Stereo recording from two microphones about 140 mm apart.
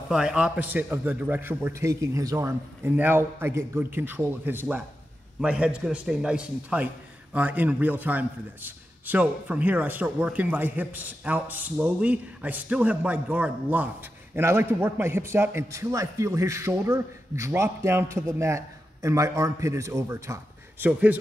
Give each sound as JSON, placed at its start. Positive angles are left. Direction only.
{"t": 0.1, "sound": "a man's voice", "side_deg": -5}